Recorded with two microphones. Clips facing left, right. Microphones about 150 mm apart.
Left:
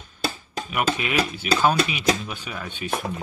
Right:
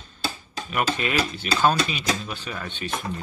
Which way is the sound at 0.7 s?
10° left (ahead or behind).